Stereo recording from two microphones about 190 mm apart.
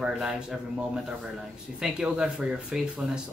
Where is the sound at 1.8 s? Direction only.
5° right (ahead or behind).